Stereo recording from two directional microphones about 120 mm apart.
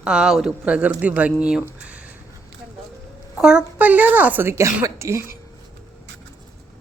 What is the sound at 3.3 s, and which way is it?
A woman's voice, 10° right (ahead or behind).